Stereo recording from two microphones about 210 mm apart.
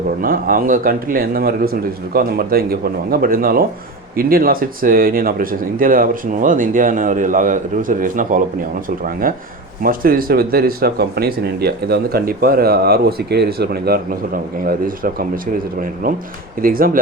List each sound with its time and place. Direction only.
0.2 s speech: 45° right (ahead or behind)